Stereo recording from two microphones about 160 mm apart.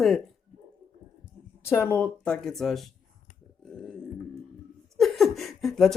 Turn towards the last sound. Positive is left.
turn(degrees=0)  # may be behind; listen again after turning